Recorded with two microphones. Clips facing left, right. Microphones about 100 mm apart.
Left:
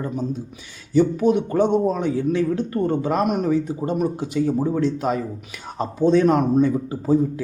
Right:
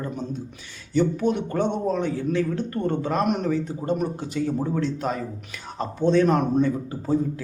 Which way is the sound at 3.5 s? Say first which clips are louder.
Left 3 dB; 15° left (ahead or behind).